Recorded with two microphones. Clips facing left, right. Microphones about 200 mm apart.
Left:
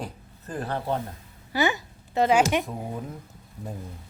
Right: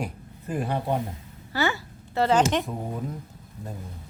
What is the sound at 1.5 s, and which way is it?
Speech, 15° left (ahead or behind).